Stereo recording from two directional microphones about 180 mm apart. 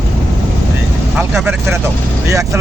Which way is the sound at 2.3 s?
15° right (ahead or behind).